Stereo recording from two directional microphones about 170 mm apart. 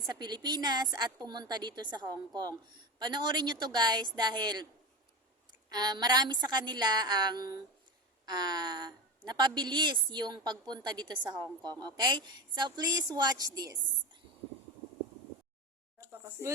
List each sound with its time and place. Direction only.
0.0 s a woman's voice: 25° right (ahead or behind)
5.6 s a woman's voice: 25° right (ahead or behind)
16.0 s a sound: 15° right (ahead or behind)